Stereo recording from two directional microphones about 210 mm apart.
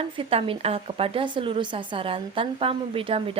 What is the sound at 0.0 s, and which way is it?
A woman's voice, 25° right (ahead or behind).